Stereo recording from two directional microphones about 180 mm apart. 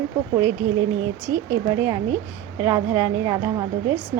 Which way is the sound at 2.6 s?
15° right (ahead or behind).